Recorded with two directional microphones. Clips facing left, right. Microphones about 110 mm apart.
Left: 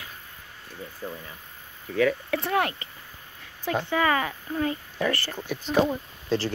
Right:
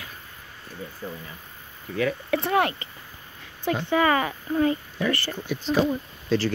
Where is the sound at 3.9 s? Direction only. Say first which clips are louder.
Right 3 dB; 30° right (ahead or behind).